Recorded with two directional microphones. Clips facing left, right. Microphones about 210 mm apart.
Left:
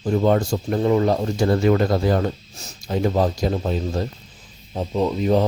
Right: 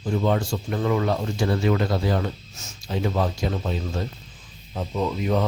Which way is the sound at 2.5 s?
35° left (ahead or behind).